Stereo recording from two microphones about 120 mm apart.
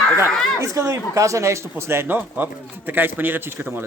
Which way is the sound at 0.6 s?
25° right (ahead or behind).